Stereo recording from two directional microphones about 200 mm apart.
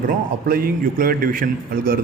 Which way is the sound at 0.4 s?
50° right (ahead or behind).